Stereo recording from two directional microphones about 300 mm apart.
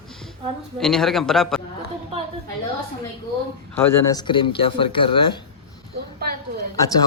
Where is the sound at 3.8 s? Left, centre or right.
Centre.